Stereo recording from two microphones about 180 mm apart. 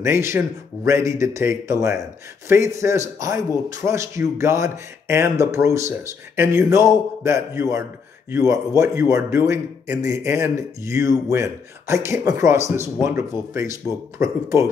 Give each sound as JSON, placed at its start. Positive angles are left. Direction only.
{"t": 0.0, "sound": "speech", "side_deg": -15}